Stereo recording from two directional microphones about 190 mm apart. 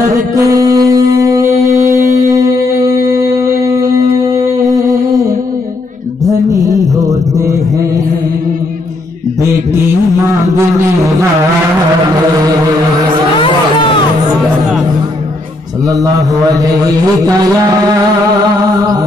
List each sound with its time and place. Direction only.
0.3 s music: 20° right (ahead or behind)
2.0 s a sound: 20° right (ahead or behind)
7.0 s mantra: 20° right (ahead or behind)
15.9 s mantra: 20° right (ahead or behind)